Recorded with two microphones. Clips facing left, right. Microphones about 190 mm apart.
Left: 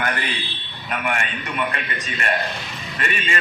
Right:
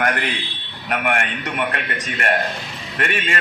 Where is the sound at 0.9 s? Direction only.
65° right (ahead or behind).